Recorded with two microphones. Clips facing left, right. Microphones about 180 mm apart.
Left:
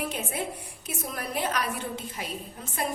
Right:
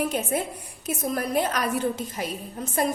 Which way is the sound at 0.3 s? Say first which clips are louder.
Right 5 dB; 45° right (ahead or behind).